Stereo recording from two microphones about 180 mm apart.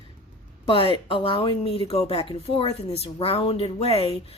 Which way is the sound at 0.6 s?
30° left (ahead or behind).